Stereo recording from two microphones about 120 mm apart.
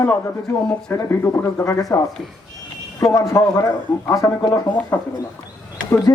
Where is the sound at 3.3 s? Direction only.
25° left (ahead or behind).